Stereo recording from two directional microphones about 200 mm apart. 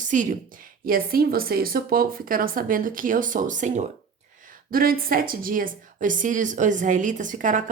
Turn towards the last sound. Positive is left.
turn(degrees=-40)  # may be behind; listen again after turning